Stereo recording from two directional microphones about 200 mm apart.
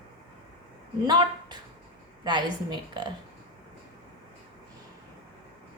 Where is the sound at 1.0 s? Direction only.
20° right (ahead or behind).